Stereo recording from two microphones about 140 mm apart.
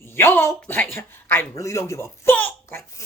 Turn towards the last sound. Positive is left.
turn(degrees=20)  # may be behind; listen again after turning